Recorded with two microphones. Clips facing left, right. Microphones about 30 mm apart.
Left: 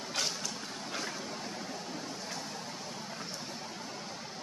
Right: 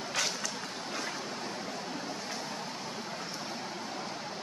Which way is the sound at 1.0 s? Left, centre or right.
Centre.